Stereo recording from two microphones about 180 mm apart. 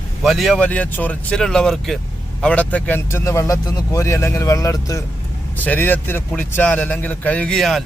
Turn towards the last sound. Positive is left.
turn(degrees=0)  # may be behind; listen again after turning